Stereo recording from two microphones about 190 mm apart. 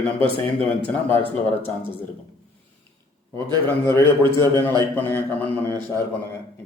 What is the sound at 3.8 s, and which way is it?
Speech, 15° left (ahead or behind).